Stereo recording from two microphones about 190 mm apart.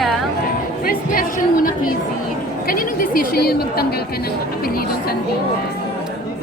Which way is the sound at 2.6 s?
50° left (ahead or behind).